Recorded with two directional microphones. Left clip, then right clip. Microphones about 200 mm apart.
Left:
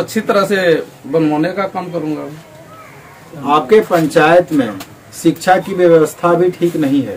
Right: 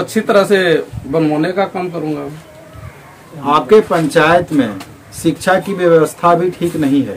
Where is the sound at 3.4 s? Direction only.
35° right (ahead or behind).